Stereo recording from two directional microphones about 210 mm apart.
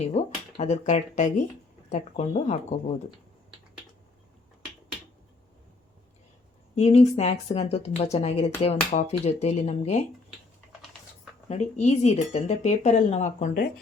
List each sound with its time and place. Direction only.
0.0 s speech: 30° left (ahead or behind)
6.7 s speech: 30° left (ahead or behind)
11.4 s speech: 30° left (ahead or behind)